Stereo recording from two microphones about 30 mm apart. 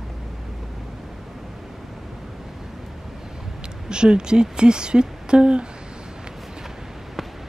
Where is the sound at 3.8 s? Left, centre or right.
Right.